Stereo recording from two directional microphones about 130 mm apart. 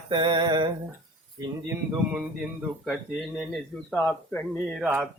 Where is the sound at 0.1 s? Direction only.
35° right (ahead or behind).